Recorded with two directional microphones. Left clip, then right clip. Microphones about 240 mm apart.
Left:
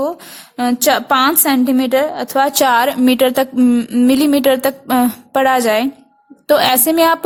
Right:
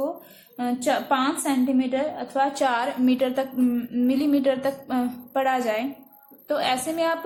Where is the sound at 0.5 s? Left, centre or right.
Left.